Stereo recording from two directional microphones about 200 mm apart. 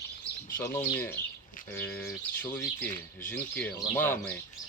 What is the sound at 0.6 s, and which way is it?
Speech, 10° left (ahead or behind).